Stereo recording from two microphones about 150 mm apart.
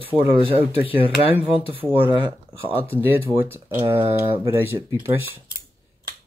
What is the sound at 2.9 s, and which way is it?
Speech, 15° right (ahead or behind).